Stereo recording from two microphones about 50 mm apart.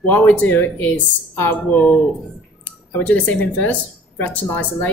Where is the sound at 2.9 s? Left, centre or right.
Left.